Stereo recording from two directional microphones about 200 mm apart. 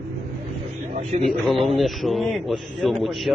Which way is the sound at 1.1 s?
35° right (ahead or behind).